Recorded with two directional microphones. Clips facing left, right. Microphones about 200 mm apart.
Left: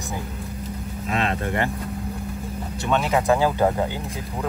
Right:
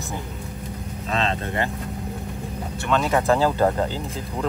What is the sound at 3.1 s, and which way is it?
Speech, 15° left (ahead or behind).